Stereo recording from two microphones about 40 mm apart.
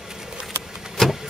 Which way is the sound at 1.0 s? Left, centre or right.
Centre.